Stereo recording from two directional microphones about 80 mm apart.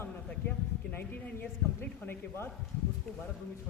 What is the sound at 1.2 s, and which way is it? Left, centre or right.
Speech, left.